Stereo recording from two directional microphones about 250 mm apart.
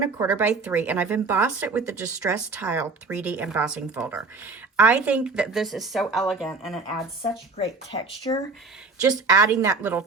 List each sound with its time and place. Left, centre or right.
0.2 s speech: centre
7.2 s speech: left
9.0 s speech: centre